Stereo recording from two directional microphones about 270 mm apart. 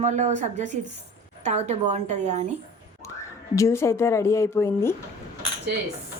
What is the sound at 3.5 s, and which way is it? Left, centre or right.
Speech, centre.